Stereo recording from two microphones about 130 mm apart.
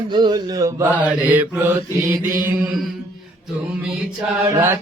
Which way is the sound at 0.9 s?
10° right (ahead or behind).